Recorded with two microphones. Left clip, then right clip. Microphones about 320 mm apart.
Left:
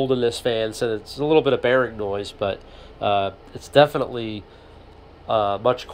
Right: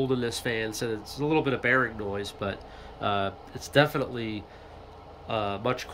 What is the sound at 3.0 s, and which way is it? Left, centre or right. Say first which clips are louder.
Speech: left 7 dB; centre.